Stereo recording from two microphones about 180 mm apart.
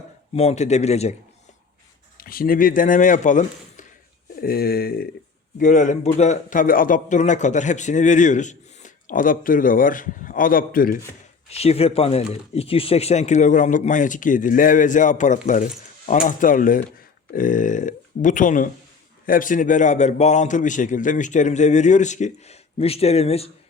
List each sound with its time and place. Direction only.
0.3 s a man's voice: 40° left (ahead or behind)
2.1 s speech: 55° left (ahead or behind)
4.4 s a sound: 55° left (ahead or behind)
5.5 s a man's voice: 45° left (ahead or behind)
11.4 s a man's voice: 35° left (ahead or behind)